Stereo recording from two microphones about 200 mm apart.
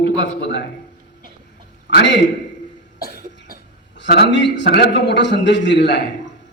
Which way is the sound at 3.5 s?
55° left (ahead or behind).